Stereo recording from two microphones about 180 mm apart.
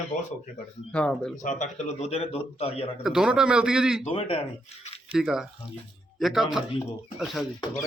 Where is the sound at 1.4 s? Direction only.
40° left (ahead or behind).